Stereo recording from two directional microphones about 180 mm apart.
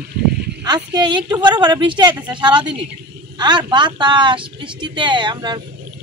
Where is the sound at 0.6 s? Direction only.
25° right (ahead or behind).